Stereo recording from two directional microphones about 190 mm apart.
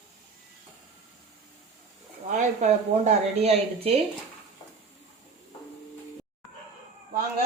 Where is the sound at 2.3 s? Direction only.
40° right (ahead or behind).